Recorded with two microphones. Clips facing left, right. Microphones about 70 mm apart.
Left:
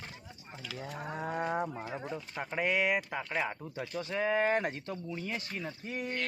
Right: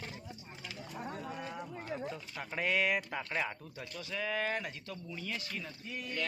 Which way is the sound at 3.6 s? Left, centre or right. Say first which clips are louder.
Left 7 dB; left.